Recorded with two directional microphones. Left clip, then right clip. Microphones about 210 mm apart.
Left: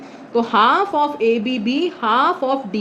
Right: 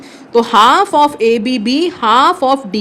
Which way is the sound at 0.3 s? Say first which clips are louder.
Right 6 dB; 55° right (ahead or behind).